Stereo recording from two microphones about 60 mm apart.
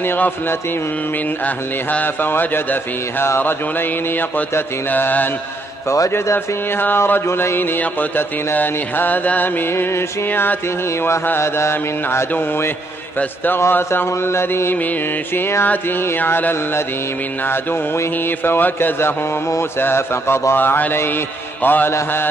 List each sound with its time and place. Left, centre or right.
1.4 s a sound: left
2.3 s mantra: left
4.6 s mantra: left
5.9 s mantra: left
15.6 s a sound: left
16.3 s mantra: left